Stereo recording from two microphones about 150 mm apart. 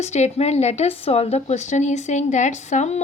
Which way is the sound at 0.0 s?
50° left (ahead or behind).